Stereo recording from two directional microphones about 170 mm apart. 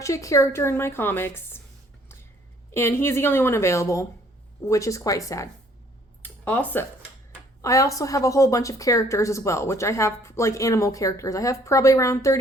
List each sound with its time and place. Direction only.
0.0 s a woman's voice: 20° left (ahead or behind)
2.7 s a woman's voice: 15° left (ahead or behind)
6.2 s a sound: 10° left (ahead or behind)
7.6 s a woman's voice: 20° left (ahead or behind)